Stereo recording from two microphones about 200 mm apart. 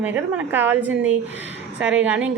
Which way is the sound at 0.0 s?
10° right (ahead or behind).